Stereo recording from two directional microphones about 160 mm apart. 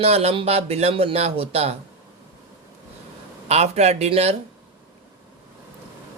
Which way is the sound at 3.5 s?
40° right (ahead or behind).